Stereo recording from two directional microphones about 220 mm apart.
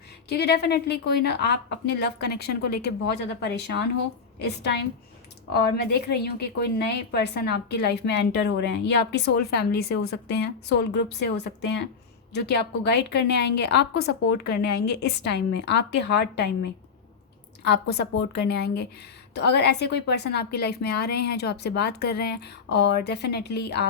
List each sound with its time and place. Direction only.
0.3 s a woman's voice: 50° left (ahead or behind)